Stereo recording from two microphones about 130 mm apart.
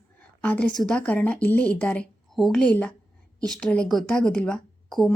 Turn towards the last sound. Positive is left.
turn(degrees=0)  # may be behind; listen again after turning